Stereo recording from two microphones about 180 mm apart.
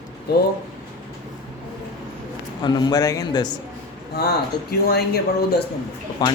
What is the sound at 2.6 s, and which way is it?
Speech, 25° left (ahead or behind).